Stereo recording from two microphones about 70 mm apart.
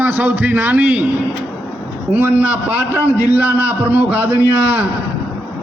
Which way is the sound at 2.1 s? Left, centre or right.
Right.